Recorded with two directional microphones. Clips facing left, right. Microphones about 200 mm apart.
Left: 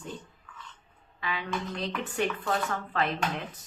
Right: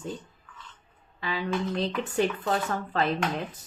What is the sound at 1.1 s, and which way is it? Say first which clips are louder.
Speech: right 2 dB; 35° right (ahead or behind).